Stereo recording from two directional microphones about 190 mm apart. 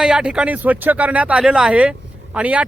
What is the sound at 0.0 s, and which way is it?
Speech, 5° right (ahead or behind).